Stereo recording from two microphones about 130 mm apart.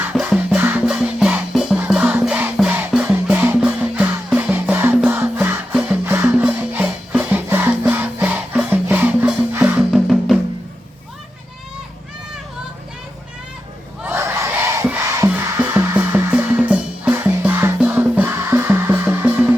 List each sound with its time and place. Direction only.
0.1 s music: 10° right (ahead or behind)
9.9 s music: centre (ahead or behind)
14.0 s crowd: 15° right (ahead or behind)
15.0 s music: 25° right (ahead or behind)